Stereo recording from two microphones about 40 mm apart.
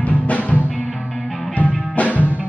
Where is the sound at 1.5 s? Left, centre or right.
Left.